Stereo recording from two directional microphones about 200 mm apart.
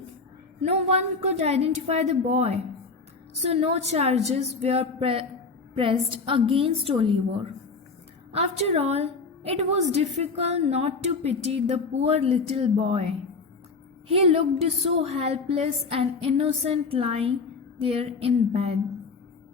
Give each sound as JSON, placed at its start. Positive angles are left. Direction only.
{"t": 0.6, "sound": "a woman's voice", "side_deg": -35}
{"t": 8.3, "sound": "a woman's voice", "side_deg": -30}